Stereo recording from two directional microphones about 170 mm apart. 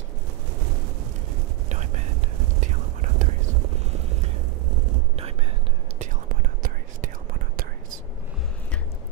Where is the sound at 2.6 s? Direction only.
45° right (ahead or behind).